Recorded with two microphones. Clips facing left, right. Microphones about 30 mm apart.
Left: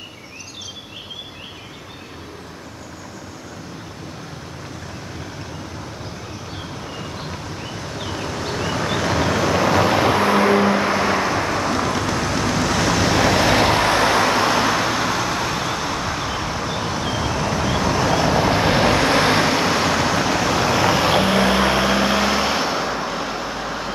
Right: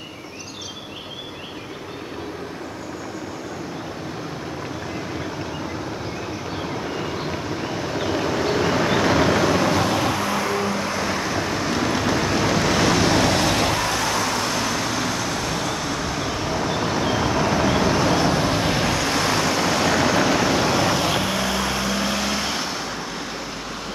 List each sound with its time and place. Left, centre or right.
6.9 s vehicle: centre
9.9 s vehicle: left
11.3 s waves: centre
13.4 s vehicle: left; by 18.4 s centre
18.4 s vehicle: left
18.8 s vehicle: left
19.7 s vehicle: centre
21.1 s vehicle: left; by 23.8 s centre